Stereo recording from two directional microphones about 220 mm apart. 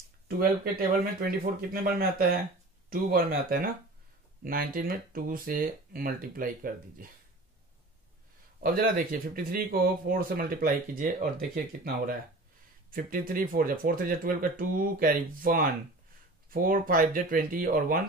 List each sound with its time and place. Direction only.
0.4 s speech: 40° right (ahead or behind)
8.6 s speech: 40° right (ahead or behind)